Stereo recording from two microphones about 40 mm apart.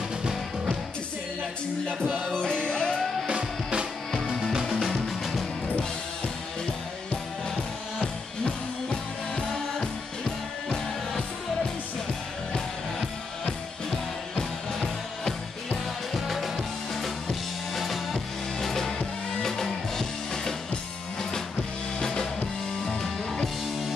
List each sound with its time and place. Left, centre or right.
2.3 s music: left
3.3 s music: right
4.3 s music: centre
8.0 s music: left
13.5 s music: centre
22.0 s music: centre